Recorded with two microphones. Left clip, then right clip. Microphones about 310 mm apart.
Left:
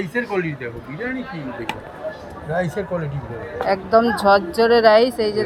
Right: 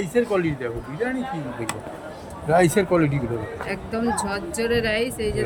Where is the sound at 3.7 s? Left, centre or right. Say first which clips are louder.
Left 11 dB; centre.